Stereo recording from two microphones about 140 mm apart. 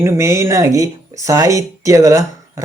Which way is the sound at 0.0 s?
20° right (ahead or behind).